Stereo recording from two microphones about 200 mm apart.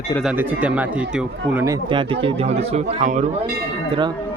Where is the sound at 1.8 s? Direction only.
25° right (ahead or behind).